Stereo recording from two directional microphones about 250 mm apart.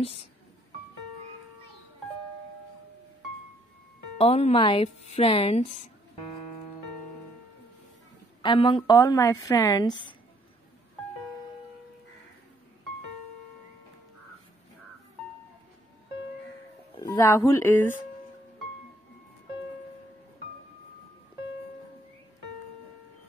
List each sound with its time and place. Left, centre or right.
4.2 s speech: left
8.4 s a woman's voice: centre
16.9 s speech: centre